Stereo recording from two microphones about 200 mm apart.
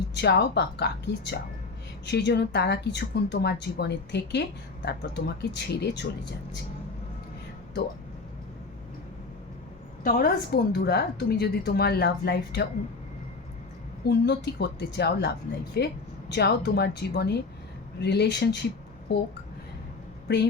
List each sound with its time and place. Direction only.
0.1 s speech: 55° left (ahead or behind)
10.0 s speech: 45° left (ahead or behind)
14.0 s a woman's voice: 55° left (ahead or behind)